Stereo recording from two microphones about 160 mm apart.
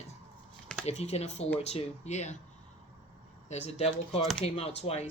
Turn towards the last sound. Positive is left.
turn(degrees=40)  # may be behind; listen again after turning